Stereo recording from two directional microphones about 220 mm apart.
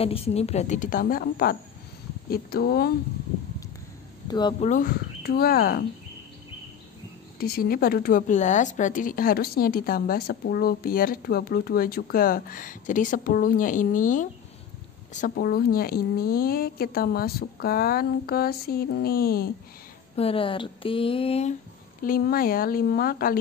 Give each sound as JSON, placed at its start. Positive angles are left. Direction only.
{"t": 0.0, "sound": "a woman's voice", "side_deg": 25}
{"t": 4.3, "sound": "speech", "side_deg": 20}
{"t": 4.6, "sound": "a woman's voice", "side_deg": 40}
{"t": 7.3, "sound": "a woman's voice", "side_deg": 45}
{"t": 20.2, "sound": "speech", "side_deg": 25}
{"t": 22.0, "sound": "a woman's voice", "side_deg": 40}